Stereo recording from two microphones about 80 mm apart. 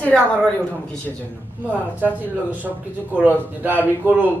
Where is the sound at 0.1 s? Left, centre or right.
Centre.